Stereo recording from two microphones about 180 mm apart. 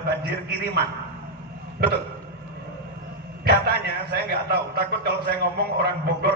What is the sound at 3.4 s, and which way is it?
A man's voice, 65° right (ahead or behind).